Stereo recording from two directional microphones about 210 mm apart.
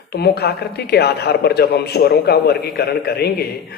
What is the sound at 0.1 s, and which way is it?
Speech, 50° left (ahead or behind).